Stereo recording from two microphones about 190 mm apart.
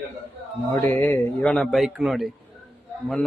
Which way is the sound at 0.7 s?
10° left (ahead or behind).